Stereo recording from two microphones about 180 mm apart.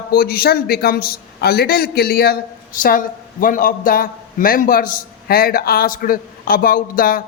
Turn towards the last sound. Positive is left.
turn(degrees=55)  # may be behind; listen again after turning